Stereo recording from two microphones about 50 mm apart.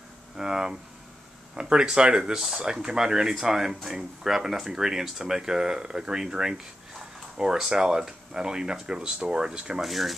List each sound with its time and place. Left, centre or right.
0.4 s speech: centre
9.8 s speech: centre